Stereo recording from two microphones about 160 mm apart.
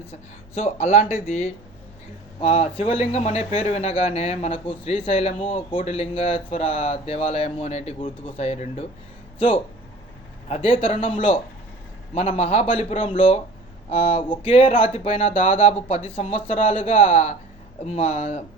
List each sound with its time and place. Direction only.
0.1 s speech: 40° left (ahead or behind)
10.5 s speech: 35° left (ahead or behind)